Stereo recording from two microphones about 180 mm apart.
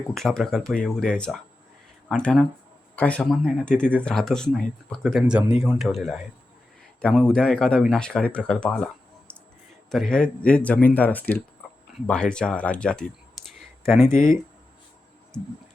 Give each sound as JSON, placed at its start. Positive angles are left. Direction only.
{"t": 0.1, "sound": "speech", "side_deg": 0}
{"t": 13.4, "sound": "clicking", "side_deg": 0}
{"t": 14.1, "sound": "speech", "side_deg": 50}